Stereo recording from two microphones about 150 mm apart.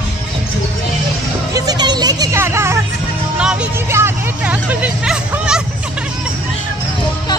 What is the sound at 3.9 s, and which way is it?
Hubbub, 15° right (ahead or behind).